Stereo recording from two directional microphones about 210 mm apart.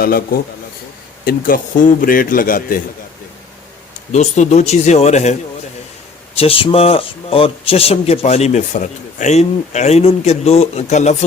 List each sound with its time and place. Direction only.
1.2 s a man's voice: 45° left (ahead or behind)
4.1 s a man's voice: 35° left (ahead or behind)